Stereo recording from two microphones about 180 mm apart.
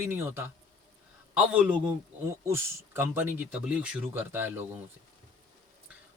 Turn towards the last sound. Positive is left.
turn(degrees=-10)  # may be behind; listen again after turning